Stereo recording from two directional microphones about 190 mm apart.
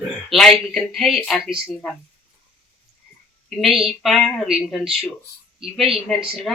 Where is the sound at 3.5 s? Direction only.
Centre (ahead or behind).